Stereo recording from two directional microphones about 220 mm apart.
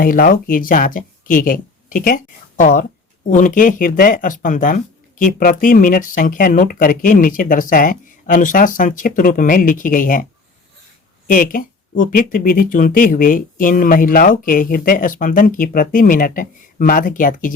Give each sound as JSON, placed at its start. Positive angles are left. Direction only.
{"t": 0.0, "sound": "speech", "side_deg": 40}
{"t": 11.3, "sound": "speech", "side_deg": 40}